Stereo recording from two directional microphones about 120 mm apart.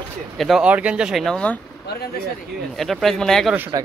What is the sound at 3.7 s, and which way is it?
Speech, 30° right (ahead or behind).